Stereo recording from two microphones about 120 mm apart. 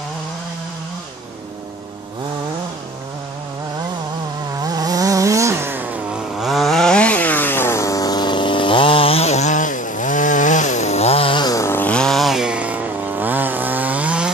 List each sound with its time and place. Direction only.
4.6 s vehicle: 30° right (ahead or behind)
6.4 s chainsaw: centre (ahead or behind); by 11.5 s 45° left (ahead or behind)
11.5 s chainsaw: 20° left (ahead or behind); by 14.3 s 10° right (ahead or behind)